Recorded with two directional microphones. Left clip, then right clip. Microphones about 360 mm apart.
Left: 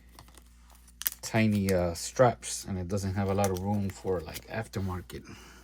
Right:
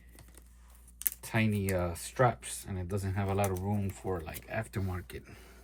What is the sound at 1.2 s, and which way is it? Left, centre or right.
Speech, centre.